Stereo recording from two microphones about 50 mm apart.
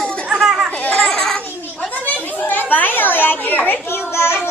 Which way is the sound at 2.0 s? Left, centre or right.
Left.